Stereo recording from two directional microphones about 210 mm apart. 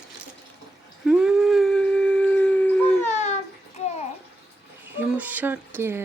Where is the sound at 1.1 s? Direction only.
5° right (ahead or behind).